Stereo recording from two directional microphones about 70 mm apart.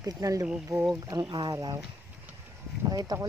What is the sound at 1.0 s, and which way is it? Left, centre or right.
Speech, right.